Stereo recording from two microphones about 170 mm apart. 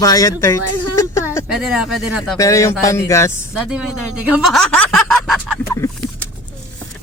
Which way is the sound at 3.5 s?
5° right (ahead or behind).